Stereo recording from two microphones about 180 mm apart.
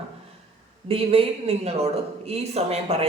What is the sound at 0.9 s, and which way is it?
A man's voice, 30° right (ahead or behind).